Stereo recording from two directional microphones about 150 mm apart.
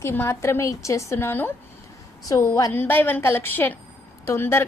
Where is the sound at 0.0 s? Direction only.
15° left (ahead or behind).